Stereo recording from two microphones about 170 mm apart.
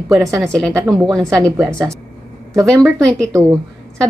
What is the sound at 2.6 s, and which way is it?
Speech, centre (ahead or behind).